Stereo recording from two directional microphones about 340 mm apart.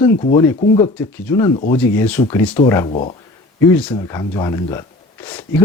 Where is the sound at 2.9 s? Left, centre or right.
Centre.